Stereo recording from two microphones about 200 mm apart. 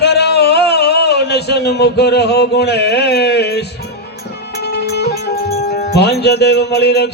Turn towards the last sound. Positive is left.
turn(degrees=55)  # may be behind; listen again after turning